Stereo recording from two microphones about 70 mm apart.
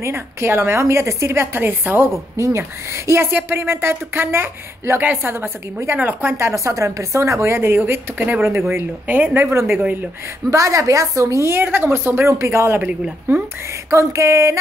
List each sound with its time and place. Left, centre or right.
0.0 s a woman's voice: right
6.3 s a woman's voice: right
9.5 s a woman's voice: right
13.8 s a woman's voice: right